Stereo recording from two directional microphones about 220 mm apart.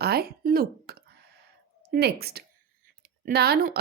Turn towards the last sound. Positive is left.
turn(degrees=-45)  # may be behind; listen again after turning